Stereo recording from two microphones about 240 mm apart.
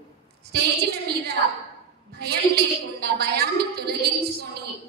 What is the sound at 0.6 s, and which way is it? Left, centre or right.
A woman's voice, right.